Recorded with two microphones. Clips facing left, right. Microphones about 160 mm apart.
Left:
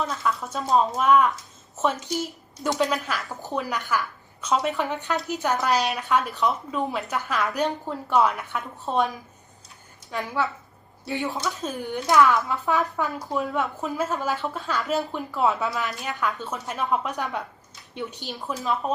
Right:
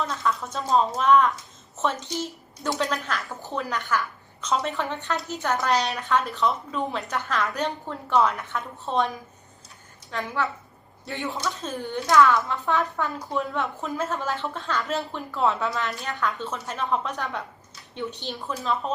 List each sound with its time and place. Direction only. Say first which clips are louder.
0.2 s a woman's voice: even; 5° left (ahead or behind)
5.5 s a woman's voice: left 1 dB; 5° left (ahead or behind)
10.1 s a woman's voice: left 1 dB; 15° left (ahead or behind)